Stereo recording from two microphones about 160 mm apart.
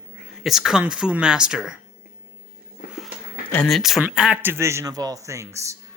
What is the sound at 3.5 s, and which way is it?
A man's voice, 5° left (ahead or behind).